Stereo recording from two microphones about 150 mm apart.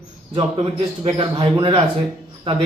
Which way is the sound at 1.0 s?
35° right (ahead or behind).